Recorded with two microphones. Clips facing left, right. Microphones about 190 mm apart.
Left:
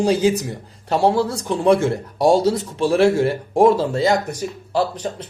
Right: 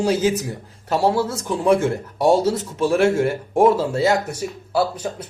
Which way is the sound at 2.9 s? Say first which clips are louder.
Left 2 dB; 30° left (ahead or behind).